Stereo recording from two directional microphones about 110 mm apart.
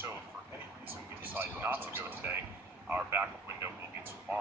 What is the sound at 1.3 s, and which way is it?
Speech, 15° right (ahead or behind).